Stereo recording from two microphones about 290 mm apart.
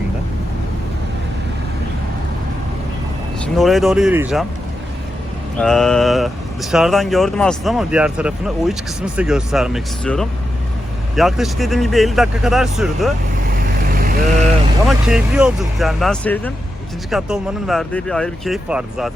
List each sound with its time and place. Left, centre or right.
3.4 s speech: centre
5.5 s speech: centre
13.9 s vehicle: right
14.8 s speech: centre